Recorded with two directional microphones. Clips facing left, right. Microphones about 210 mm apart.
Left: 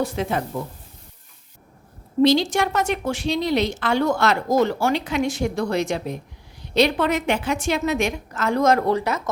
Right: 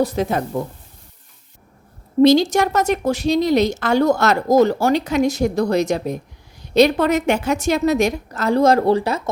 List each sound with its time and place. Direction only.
0.0 s a woman's voice: 40° right (ahead or behind)
2.2 s a woman's voice: 45° right (ahead or behind)